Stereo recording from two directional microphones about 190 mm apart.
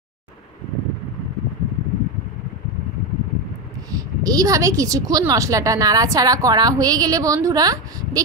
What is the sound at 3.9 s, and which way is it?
A woman's voice, 20° right (ahead or behind).